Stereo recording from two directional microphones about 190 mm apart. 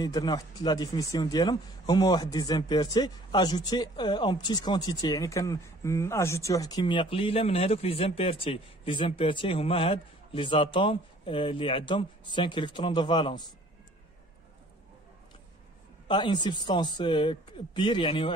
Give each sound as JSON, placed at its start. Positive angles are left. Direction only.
{"t": 0.0, "sound": "speech", "side_deg": 20}
{"t": 16.1, "sound": "speech", "side_deg": 25}